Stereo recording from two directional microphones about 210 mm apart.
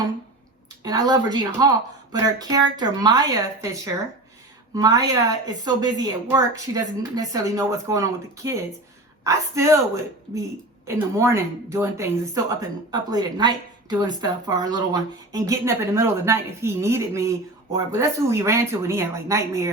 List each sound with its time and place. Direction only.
0.8 s a woman's voice: 20° right (ahead or behind)